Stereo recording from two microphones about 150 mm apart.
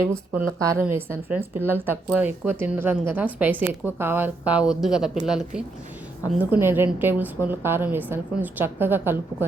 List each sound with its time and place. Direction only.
0.0 s a woman's voice: 20° right (ahead or behind)